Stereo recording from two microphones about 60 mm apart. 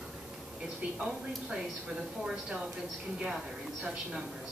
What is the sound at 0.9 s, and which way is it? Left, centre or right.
Speech, centre.